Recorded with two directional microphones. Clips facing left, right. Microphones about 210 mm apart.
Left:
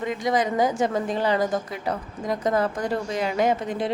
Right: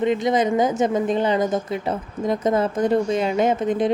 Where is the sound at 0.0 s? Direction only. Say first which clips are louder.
Right 5 dB; 25° right (ahead or behind).